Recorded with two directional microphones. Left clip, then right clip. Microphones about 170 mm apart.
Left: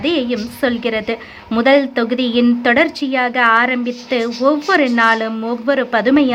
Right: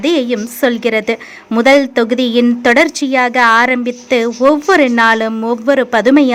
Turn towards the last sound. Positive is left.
turn(degrees=-25)  # may be behind; listen again after turning